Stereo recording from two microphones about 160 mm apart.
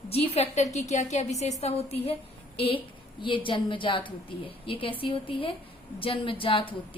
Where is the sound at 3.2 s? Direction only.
30° left (ahead or behind).